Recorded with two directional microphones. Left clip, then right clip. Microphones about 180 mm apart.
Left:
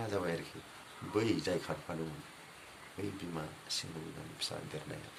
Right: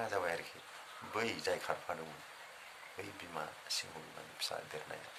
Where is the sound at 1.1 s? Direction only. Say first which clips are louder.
Left 3 dB; 20° right (ahead or behind).